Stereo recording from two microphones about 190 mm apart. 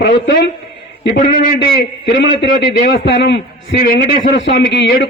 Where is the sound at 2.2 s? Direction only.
65° left (ahead or behind).